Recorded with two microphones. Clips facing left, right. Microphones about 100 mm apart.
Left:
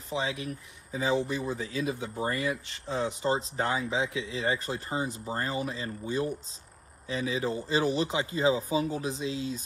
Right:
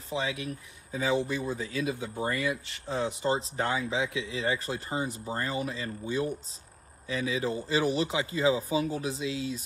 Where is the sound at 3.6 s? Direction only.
30° left (ahead or behind).